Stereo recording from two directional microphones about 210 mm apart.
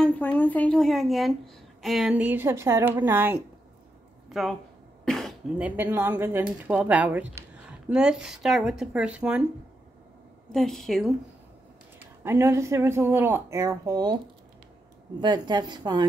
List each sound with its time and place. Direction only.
0.0 s a woman's voice: 5° left (ahead or behind)
5.0 s cough: centre (ahead or behind)
5.8 s a woman's voice: 10° right (ahead or behind)
10.5 s a woman's voice: centre (ahead or behind)
12.2 s a woman's voice: 10° right (ahead or behind)